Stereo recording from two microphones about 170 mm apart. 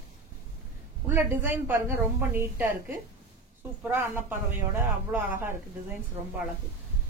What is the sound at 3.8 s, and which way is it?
A woman's voice, 15° right (ahead or behind).